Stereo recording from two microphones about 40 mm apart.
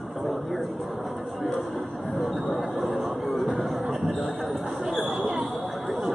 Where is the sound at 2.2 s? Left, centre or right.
Centre.